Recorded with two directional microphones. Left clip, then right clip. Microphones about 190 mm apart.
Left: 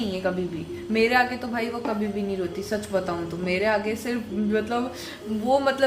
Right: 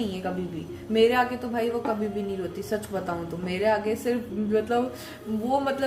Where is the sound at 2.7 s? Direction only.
5° left (ahead or behind).